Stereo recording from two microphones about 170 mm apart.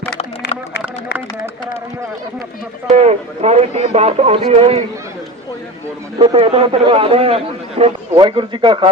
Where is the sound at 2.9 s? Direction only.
40° right (ahead or behind).